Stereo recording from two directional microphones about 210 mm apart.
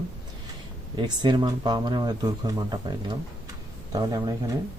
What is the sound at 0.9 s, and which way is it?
Speech, 20° right (ahead or behind).